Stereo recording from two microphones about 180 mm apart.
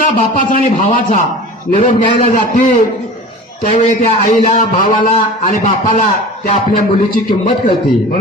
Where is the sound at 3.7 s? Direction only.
45° left (ahead or behind).